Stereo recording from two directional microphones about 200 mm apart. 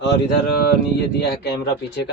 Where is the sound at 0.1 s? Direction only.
55° left (ahead or behind).